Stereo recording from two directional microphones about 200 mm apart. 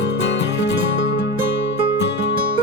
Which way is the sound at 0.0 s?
60° left (ahead or behind).